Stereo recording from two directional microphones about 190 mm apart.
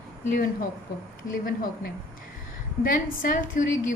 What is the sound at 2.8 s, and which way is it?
A woman's voice, 45° left (ahead or behind).